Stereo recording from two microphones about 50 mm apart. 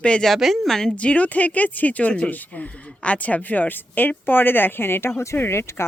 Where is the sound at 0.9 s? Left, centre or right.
Left.